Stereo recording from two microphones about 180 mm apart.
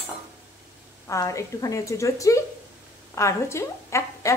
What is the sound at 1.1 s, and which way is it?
A woman's voice, 15° left (ahead or behind).